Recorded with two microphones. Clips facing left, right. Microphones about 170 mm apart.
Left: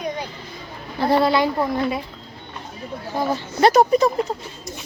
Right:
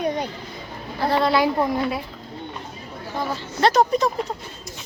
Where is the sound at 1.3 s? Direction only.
5° right (ahead or behind).